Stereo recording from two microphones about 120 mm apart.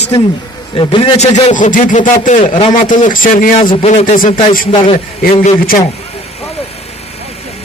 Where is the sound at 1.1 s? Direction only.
70° left (ahead or behind); by 3.6 s 90° left.